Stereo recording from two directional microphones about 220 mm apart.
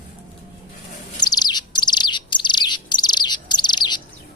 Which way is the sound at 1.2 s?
20° left (ahead or behind).